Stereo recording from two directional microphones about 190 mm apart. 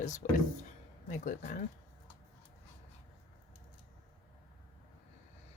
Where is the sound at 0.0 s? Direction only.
40° left (ahead or behind).